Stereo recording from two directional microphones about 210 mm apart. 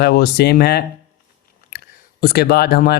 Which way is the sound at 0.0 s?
50° left (ahead or behind).